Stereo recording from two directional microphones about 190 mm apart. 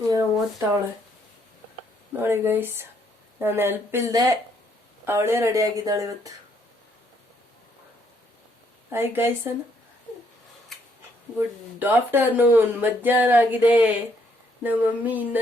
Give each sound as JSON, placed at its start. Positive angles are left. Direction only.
{"t": 0.1, "sound": "a sound", "side_deg": -15}
{"t": 2.1, "sound": "speech", "side_deg": -10}
{"t": 8.9, "sound": "speech", "side_deg": -10}
{"t": 11.3, "sound": "speech", "side_deg": -10}